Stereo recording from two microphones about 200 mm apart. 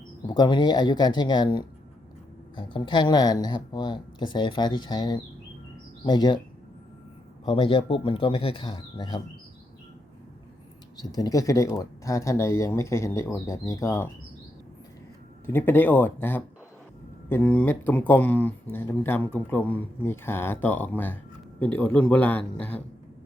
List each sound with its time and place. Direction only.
0.3 s speech: 20° left (ahead or behind)
7.4 s speech: 25° left (ahead or behind)
11.1 s speech: 20° left (ahead or behind)
15.4 s speech: 10° left (ahead or behind)